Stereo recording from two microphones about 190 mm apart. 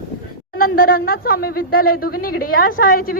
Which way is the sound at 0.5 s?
50° left (ahead or behind).